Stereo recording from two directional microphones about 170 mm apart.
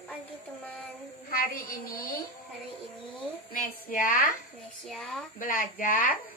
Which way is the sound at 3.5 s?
55° left (ahead or behind).